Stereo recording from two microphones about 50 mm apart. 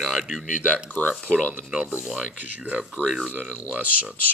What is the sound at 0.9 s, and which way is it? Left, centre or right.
Speech, left.